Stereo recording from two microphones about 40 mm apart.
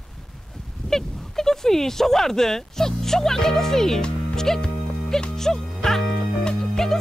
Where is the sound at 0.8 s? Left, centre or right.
Centre.